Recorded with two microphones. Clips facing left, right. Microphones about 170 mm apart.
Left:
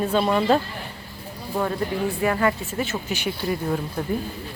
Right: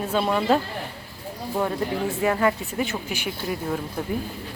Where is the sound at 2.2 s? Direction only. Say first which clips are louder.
Right 1 dB; 15° right (ahead or behind).